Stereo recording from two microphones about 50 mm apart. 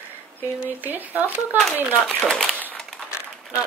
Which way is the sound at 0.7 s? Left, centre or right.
Right.